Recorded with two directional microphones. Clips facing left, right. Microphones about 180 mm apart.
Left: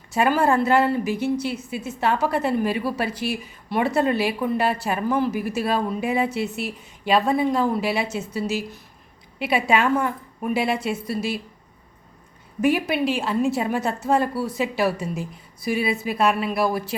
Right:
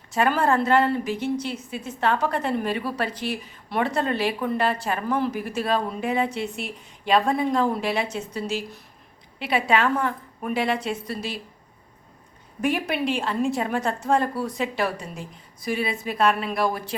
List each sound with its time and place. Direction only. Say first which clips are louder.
0.1 s a woman's voice: left 2 dB; 10° left (ahead or behind)
12.6 s a woman's voice: left 3 dB; 5° left (ahead or behind)